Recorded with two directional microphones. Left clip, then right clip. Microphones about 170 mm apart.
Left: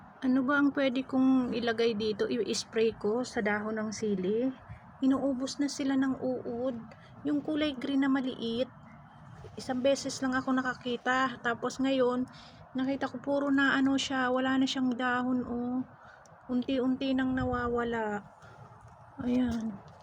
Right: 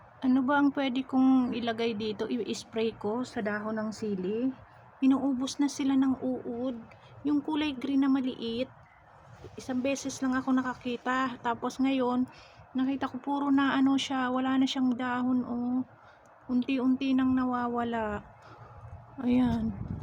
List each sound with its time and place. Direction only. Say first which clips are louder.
0.2 s speech: right 2 dB; 5° right (ahead or behind)
19.2 s a woman's voice: right 3 dB; 35° right (ahead or behind)